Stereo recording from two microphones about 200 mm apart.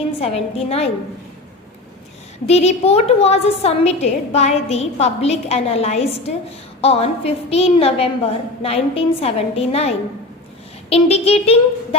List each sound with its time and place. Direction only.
0.2 s a woman's voice: 30° left (ahead or behind)
2.5 s a woman's voice: 30° left (ahead or behind)